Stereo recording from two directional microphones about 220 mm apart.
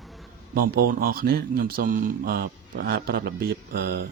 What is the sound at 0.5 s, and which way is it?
Speech, 40° right (ahead or behind).